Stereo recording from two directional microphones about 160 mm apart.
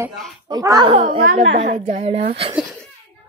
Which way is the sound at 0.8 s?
35° right (ahead or behind).